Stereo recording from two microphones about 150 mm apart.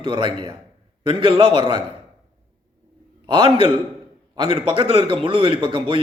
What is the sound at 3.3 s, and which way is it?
A man's voice, 35° right (ahead or behind).